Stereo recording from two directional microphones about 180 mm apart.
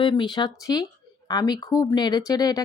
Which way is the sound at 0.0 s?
25° left (ahead or behind).